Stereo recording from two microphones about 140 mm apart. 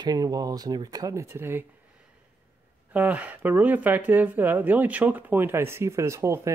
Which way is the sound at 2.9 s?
10° right (ahead or behind).